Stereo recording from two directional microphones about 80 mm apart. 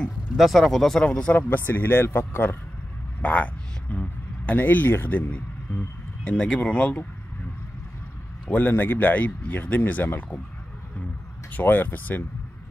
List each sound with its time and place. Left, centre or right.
0.4 s speech: centre
1.5 s a man's voice: left
3.2 s speech: centre
8.5 s a man's voice: left
11.5 s a man's voice: left